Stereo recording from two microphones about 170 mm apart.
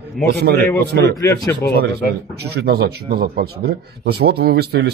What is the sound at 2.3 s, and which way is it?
A man's voice, 70° right (ahead or behind).